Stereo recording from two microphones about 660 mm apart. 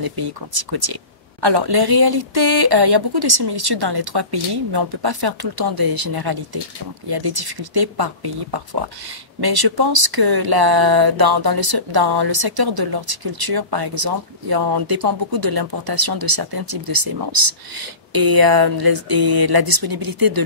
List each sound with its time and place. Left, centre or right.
0.0 s speech: right